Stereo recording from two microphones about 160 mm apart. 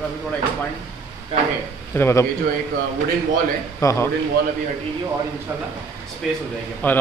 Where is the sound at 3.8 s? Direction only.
15° left (ahead or behind).